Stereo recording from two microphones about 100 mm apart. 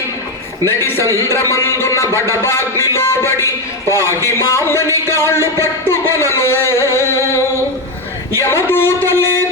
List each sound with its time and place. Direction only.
1.3 s a man's voice: 30° left (ahead or behind)